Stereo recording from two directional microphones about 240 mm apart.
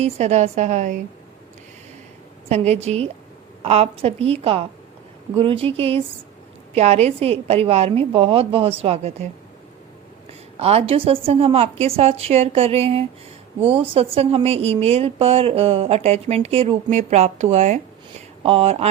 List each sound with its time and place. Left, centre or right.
0.0 s a woman's voice: right
2.5 s a woman's voice: right
10.6 s a woman's voice: right